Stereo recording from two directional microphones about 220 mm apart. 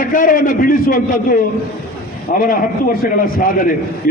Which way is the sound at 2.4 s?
40° left (ahead or behind).